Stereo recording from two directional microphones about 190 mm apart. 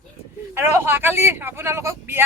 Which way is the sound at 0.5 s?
10° right (ahead or behind).